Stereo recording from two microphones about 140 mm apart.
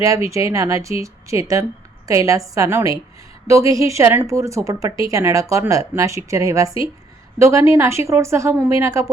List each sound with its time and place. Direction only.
0.0 s a woman's voice: 20° right (ahead or behind)